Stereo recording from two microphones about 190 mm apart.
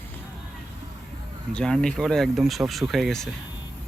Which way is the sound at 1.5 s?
5° left (ahead or behind).